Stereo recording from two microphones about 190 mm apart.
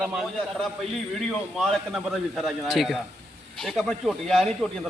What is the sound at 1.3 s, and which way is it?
A man's voice, centre (ahead or behind).